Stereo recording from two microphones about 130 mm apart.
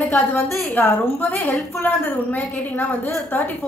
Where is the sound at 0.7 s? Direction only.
15° left (ahead or behind).